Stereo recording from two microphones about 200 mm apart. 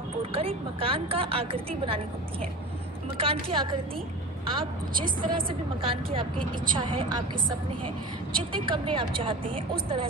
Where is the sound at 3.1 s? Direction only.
30° right (ahead or behind).